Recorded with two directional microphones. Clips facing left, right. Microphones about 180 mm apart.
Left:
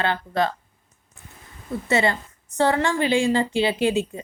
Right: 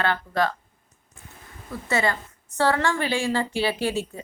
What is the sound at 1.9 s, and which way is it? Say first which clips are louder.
A woman's voice: left 3 dB; 20° left (ahead or behind).